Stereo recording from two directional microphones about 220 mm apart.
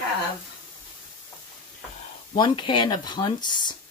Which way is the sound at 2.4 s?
20° left (ahead or behind).